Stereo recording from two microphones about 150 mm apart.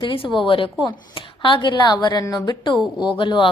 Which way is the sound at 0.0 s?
35° left (ahead or behind).